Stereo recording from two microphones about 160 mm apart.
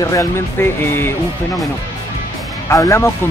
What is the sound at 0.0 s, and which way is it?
Speech, 20° left (ahead or behind).